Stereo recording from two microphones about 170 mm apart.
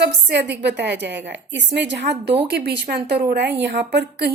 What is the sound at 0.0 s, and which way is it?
A woman's voice, 85° right.